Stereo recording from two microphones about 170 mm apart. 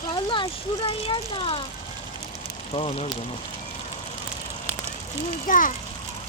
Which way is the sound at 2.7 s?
35° left (ahead or behind).